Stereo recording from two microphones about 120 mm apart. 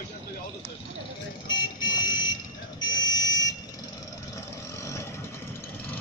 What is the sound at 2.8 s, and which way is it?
Buzzer, 35° left (ahead or behind).